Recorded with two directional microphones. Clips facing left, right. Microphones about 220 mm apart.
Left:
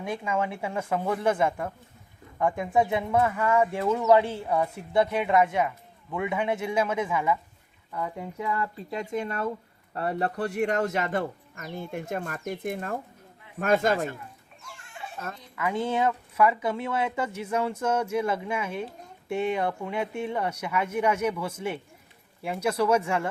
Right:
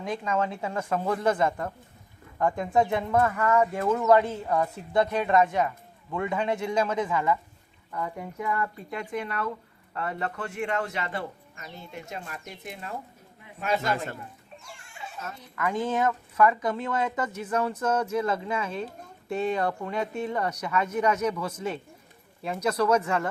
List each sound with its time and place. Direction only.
0.3 s speech: 10° left (ahead or behind); by 14.1 s 50° left (ahead or behind)
15.2 s fowl: 60° left (ahead or behind)
15.8 s speech: 15° left (ahead or behind)